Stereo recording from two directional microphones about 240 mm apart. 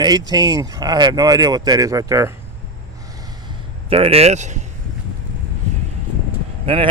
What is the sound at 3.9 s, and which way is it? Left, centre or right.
Speech, right.